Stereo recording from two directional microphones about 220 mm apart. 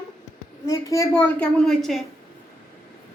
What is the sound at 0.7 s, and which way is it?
Speech, 15° left (ahead or behind).